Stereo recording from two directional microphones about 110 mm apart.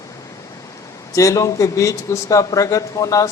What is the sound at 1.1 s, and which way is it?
Speech, 30° left (ahead or behind).